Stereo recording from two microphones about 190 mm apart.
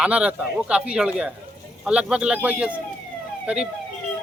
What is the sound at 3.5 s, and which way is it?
Speech, 5° right (ahead or behind).